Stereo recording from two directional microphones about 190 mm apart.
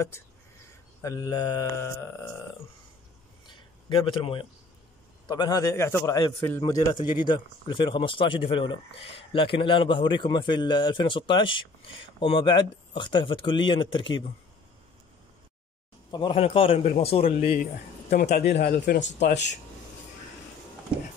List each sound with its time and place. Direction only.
1.0 s mantra: 20° left (ahead or behind)
3.4 s a sound: 25° left (ahead or behind)
5.3 s a man's voice: 20° left (ahead or behind)
16.1 s a man's voice: 25° left (ahead or behind)
18.2 s a man's voice: 55° left (ahead or behind)